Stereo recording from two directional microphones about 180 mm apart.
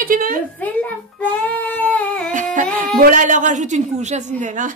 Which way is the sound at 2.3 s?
45° right (ahead or behind).